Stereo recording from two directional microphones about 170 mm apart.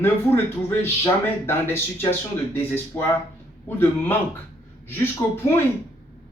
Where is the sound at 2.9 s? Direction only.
15° left (ahead or behind).